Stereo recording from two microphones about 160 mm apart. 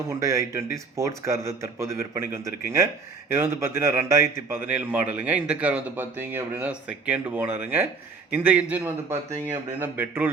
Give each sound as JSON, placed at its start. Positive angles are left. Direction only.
{"t": 0.1, "sound": "a man's voice", "side_deg": -20}